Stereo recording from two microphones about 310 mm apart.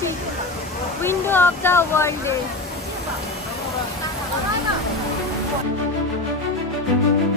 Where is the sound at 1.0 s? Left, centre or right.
Centre.